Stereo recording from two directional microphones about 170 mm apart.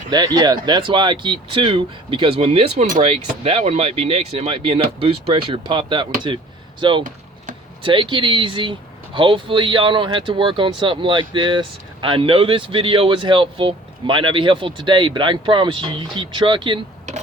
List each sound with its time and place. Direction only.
0.1 s speech: 25° right (ahead or behind)